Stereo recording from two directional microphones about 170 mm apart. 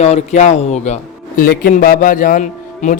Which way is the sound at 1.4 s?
55° left (ahead or behind).